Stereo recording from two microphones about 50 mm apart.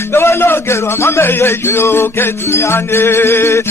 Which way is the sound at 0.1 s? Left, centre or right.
Left.